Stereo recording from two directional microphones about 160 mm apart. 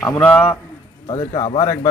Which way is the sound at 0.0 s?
15° left (ahead or behind).